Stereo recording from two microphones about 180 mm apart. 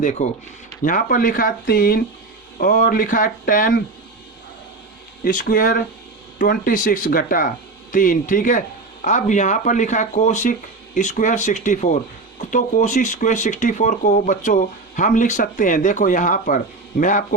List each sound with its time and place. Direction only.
0.0 s speech: 40° left (ahead or behind)
5.2 s speech: 50° left (ahead or behind)